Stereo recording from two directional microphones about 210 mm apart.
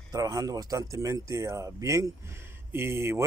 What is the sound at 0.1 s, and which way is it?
Speech, 15° right (ahead or behind).